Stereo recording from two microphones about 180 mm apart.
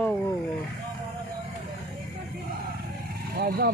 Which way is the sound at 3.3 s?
60° right (ahead or behind).